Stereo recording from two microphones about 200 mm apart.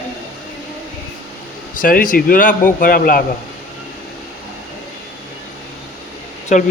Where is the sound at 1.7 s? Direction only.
45° left (ahead or behind).